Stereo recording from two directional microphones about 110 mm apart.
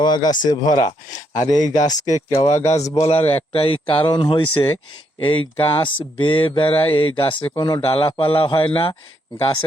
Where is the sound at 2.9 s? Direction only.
65° left (ahead or behind).